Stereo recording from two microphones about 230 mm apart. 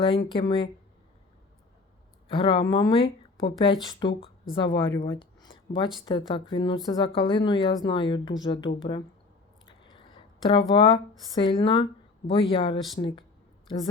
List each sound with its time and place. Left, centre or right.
0.3 s speech: left
2.3 s speech: left
9.8 s a sound: left
11.3 s speech: centre